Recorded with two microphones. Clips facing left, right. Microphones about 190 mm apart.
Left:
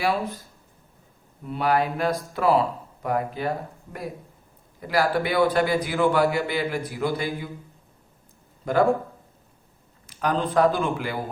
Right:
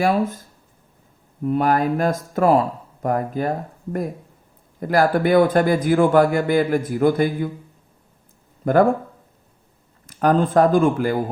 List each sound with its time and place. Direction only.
0.0 s a man's voice: 50° right (ahead or behind)
1.5 s a man's voice: 45° right (ahead or behind)
4.8 s a man's voice: 50° right (ahead or behind)
8.6 s speech: 55° right (ahead or behind)
10.1 s a man's voice: 45° right (ahead or behind)